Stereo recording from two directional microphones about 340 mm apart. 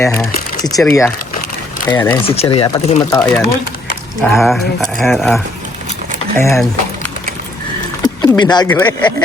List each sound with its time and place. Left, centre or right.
0.0 s speech: centre
2.2 s speech: centre
8.0 s speech: centre